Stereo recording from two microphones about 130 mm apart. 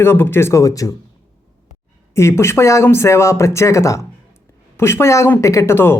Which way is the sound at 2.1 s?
20° left (ahead or behind).